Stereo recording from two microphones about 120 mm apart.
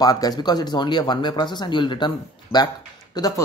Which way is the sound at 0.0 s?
30° left (ahead or behind).